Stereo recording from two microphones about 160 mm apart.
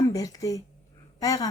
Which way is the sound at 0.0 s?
20° left (ahead or behind).